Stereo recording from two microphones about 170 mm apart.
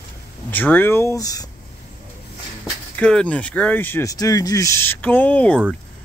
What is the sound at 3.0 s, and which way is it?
Speech, 5° left (ahead or behind).